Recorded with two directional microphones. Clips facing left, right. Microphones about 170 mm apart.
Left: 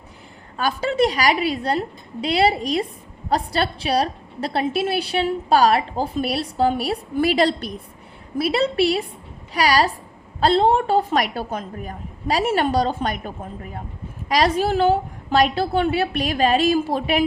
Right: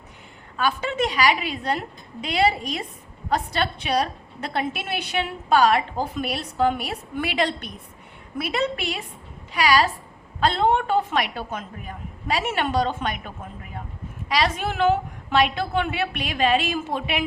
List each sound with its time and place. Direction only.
0.5 s a woman's voice: 40° left (ahead or behind)